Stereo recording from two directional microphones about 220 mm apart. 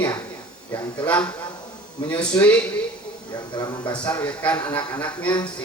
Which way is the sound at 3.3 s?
20° left (ahead or behind).